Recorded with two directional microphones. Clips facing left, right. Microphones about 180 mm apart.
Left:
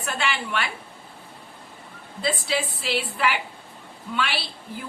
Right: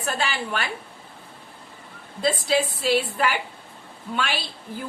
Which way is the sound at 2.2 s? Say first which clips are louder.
Right 4 dB; 45° right (ahead or behind).